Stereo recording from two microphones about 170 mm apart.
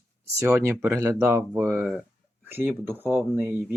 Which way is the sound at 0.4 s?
15° right (ahead or behind).